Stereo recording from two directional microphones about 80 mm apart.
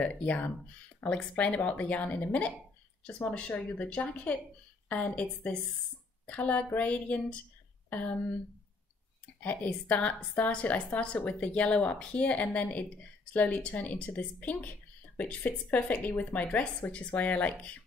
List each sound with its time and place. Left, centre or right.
0.0 s a woman's voice: centre
9.4 s a woman's voice: centre